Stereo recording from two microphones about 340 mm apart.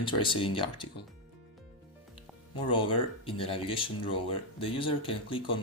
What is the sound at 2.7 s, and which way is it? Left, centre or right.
Speech, centre.